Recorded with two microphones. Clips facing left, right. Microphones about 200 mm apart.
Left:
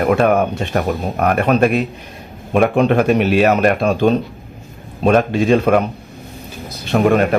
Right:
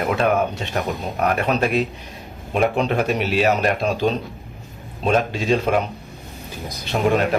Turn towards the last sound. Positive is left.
turn(degrees=55)  # may be behind; listen again after turning